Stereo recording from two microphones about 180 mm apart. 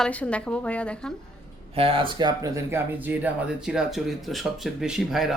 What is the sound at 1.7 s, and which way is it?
A woman's voice, 30° right (ahead or behind).